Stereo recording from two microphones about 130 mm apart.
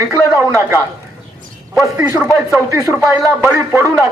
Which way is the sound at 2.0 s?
15° right (ahead or behind).